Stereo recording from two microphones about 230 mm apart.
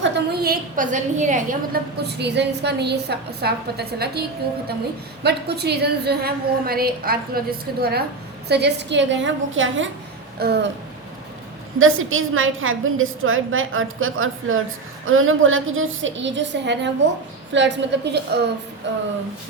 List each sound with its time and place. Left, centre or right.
0.0 s a woman's voice: right
5.2 s a woman's voice: right
10.3 s a sound: right
11.8 s a woman's voice: right